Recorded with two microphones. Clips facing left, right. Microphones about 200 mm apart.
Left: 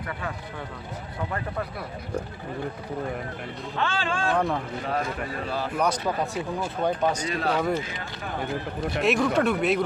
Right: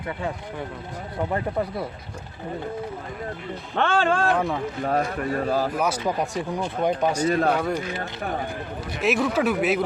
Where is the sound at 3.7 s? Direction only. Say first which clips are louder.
Right 7 dB; 55° right (ahead or behind).